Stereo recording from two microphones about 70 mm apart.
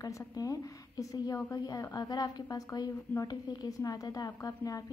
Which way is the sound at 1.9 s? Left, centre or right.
Left.